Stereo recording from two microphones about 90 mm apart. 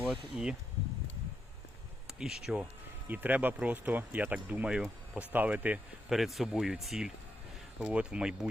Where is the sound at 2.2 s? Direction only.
5° right (ahead or behind).